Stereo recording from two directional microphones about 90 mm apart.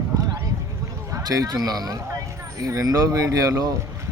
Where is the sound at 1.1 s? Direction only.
40° right (ahead or behind).